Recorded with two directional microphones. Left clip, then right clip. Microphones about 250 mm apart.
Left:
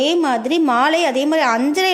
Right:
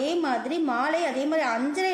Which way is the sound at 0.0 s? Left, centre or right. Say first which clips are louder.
Left 9 dB; left.